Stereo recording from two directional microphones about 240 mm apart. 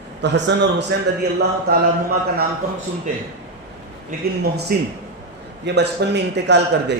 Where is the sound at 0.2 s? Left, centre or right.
Right.